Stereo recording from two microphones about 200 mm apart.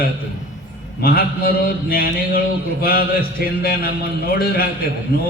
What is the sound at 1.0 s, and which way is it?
Speech, 50° left (ahead or behind).